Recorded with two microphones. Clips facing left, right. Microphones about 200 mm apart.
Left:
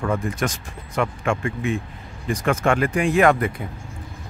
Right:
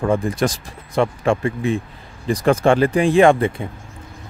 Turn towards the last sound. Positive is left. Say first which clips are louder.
# right 4 dB
turn(degrees=-25)  # may be behind; listen again after turning